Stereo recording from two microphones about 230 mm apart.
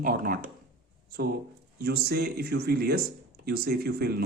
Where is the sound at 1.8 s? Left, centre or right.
Right.